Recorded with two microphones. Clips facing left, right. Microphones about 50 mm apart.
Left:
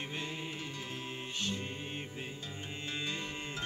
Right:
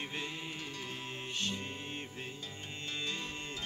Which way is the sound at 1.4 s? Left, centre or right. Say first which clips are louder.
Left 1 dB; centre.